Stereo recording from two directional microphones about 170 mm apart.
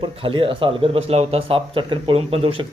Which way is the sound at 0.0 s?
30° right (ahead or behind).